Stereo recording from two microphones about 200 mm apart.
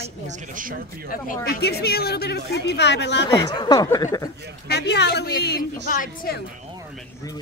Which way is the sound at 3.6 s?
20° left (ahead or behind).